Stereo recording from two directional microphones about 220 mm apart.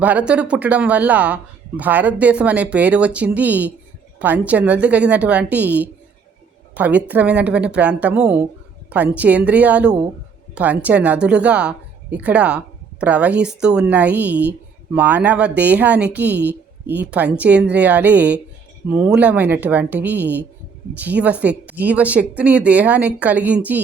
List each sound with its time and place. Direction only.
0.0 s speech: 5° right (ahead or behind)
16.3 s a woman's voice: 50° right (ahead or behind)
16.9 s speech: 5° right (ahead or behind)